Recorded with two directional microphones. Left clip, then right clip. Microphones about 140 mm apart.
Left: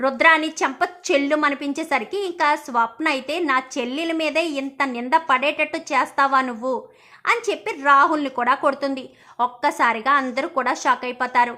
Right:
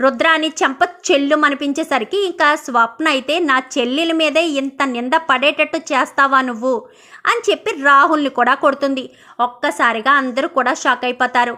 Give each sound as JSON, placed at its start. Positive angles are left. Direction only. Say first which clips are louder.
{"t": 0.0, "sound": "a woman's voice", "louder": "right 2 dB", "side_deg": -25}
{"t": 9.4, "sound": "a woman's voice", "louder": "right 4 dB", "side_deg": -15}